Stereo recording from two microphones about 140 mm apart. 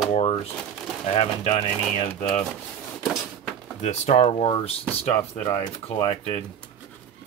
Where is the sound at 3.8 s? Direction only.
55° left (ahead or behind).